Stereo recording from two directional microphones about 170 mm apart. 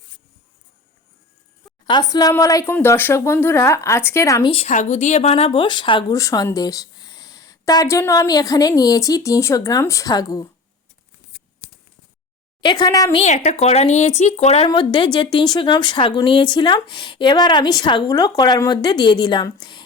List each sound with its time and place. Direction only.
1.9 s speech: 25° left (ahead or behind)
4.5 s speech: 45° left (ahead or behind); by 10.5 s 20° left (ahead or behind)
12.6 s speech: 25° left (ahead or behind)
13.1 s speech: 45° left (ahead or behind)
14.7 s speech: 25° left (ahead or behind)